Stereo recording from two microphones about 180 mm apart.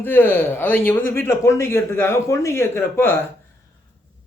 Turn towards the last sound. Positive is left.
turn(degrees=15)  # may be behind; listen again after turning